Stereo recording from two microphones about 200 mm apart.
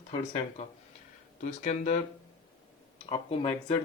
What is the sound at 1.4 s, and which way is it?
Speech, 40° left (ahead or behind).